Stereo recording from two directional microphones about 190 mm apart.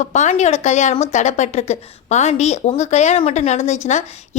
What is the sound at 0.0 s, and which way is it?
A woman's voice, 40° left (ahead or behind).